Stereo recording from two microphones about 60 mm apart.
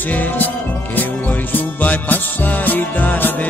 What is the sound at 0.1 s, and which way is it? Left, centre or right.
Music, left.